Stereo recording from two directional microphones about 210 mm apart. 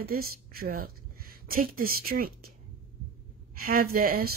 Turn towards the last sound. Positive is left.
turn(degrees=-45)  # may be behind; listen again after turning